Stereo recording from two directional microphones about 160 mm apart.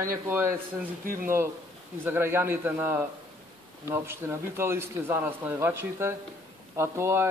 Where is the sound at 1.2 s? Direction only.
15° right (ahead or behind).